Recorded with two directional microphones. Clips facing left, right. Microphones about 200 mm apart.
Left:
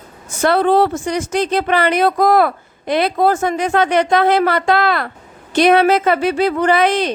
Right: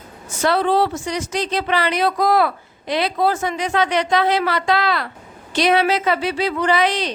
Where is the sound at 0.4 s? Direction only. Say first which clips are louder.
Left 4 dB; 50° left (ahead or behind).